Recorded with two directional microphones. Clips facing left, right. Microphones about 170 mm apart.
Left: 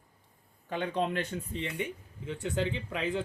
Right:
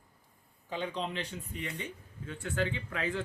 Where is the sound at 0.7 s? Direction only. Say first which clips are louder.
Left 5 dB; 55° left (ahead or behind).